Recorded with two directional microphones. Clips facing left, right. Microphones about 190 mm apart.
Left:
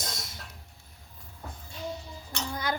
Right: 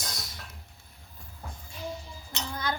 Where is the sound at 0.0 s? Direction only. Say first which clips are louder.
Left 1 dB; 25° left (ahead or behind).